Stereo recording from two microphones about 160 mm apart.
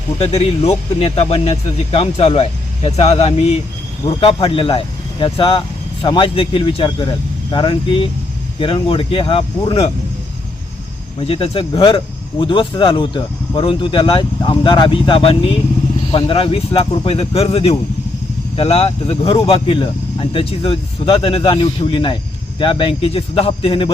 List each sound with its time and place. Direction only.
0.2 s speech: 40° left (ahead or behind)
11.2 s speech: 35° left (ahead or behind)